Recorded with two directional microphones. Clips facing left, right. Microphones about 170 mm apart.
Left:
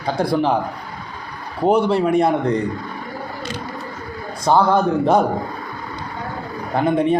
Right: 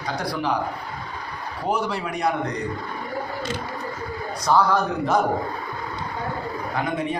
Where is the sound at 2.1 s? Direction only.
25° left (ahead or behind).